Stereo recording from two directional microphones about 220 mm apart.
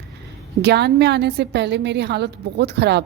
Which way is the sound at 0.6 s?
50° right (ahead or behind).